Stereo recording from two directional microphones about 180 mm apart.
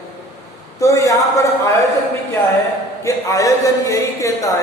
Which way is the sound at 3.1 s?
20° left (ahead or behind).